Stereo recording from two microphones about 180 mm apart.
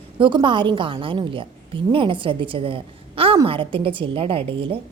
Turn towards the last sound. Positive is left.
turn(degrees=-30)  # may be behind; listen again after turning